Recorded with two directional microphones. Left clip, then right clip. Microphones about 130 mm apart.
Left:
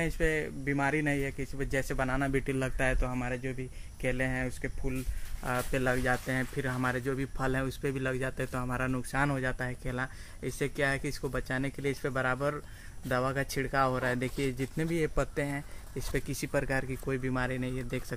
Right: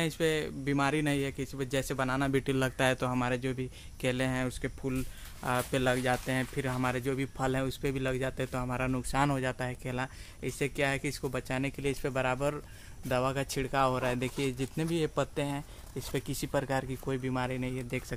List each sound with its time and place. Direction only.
0.0 s speech: 25° right (ahead or behind); by 18.0 s centre (ahead or behind)